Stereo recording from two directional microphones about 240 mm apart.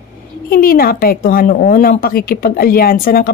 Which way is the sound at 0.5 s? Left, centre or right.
Left.